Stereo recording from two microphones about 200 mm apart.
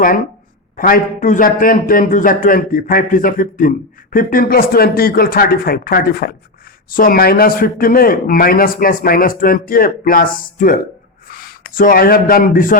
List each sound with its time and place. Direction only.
0.8 s a man's voice: 45° left (ahead or behind)